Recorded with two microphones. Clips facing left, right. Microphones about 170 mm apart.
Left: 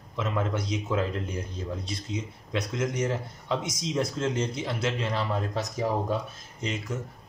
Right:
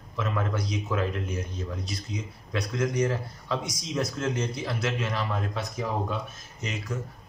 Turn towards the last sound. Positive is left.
turn(degrees=25)  # may be behind; listen again after turning